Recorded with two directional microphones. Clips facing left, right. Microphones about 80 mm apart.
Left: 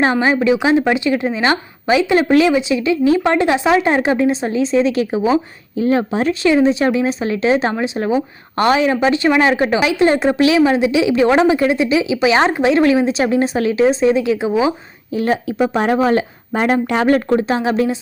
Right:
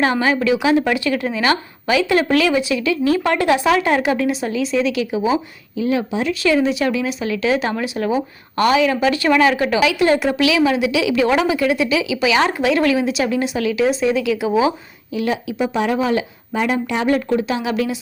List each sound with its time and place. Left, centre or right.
0.0 s speech: left
6.4 s speech: left
15.1 s speech: left